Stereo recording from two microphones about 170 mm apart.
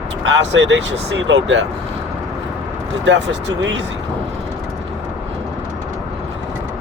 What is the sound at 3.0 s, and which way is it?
Speech, 90° right.